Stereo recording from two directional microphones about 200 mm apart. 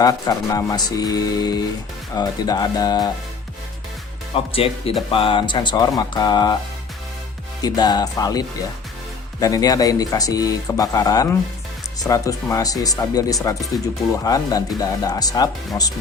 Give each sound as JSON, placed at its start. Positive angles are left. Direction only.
{"t": 0.0, "sound": "speech", "side_deg": 20}
{"t": 4.5, "sound": "speech", "side_deg": 30}
{"t": 7.6, "sound": "speech", "side_deg": 20}